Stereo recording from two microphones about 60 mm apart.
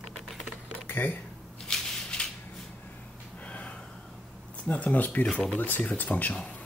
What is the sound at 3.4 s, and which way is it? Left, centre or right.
Gasp, left.